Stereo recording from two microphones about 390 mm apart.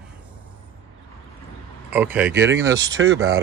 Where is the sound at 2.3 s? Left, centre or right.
Right.